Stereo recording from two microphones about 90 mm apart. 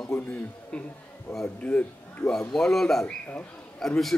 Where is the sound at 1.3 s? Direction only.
35° left (ahead or behind).